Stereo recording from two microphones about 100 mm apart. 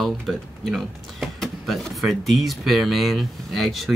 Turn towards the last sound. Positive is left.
turn(degrees=0)  # may be behind; listen again after turning